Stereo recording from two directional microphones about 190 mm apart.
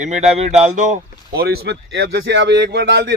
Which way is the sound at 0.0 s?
35° right (ahead or behind).